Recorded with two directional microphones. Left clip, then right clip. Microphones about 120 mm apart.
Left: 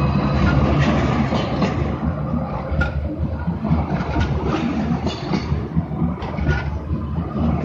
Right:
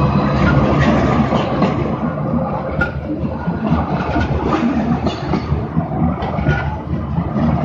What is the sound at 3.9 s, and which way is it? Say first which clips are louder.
Vehicle: right 5 dB; 35° left (ahead or behind).